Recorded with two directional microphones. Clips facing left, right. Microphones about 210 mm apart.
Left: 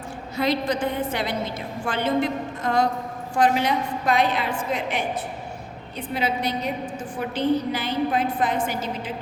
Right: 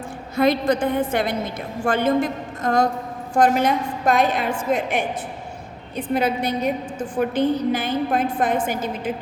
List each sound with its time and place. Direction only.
0.3 s a woman's voice: 50° right (ahead or behind)
6.1 s a woman's voice: 50° right (ahead or behind)